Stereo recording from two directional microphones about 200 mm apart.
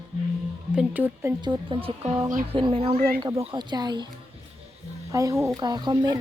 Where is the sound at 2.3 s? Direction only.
40° right (ahead or behind).